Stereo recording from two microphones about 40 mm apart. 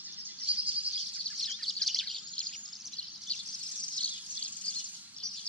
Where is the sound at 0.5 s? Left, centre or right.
Right.